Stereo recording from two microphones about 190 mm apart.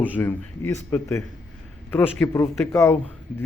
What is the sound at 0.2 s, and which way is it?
A man's voice, 10° left (ahead or behind).